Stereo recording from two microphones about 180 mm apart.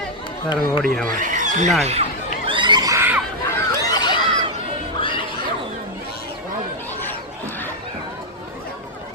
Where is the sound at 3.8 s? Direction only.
25° left (ahead or behind).